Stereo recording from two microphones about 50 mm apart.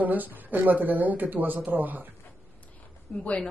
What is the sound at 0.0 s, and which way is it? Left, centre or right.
Speech, right.